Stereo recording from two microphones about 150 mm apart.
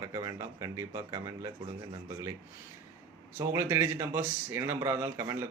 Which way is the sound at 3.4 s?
15° right (ahead or behind).